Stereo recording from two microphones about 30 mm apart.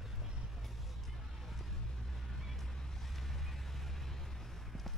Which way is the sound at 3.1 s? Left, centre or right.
Centre.